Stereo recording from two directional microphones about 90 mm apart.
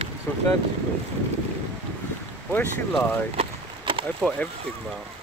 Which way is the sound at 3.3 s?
75° right (ahead or behind).